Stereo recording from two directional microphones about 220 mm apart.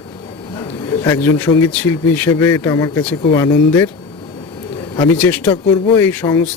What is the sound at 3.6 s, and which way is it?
Speech, 10° left (ahead or behind).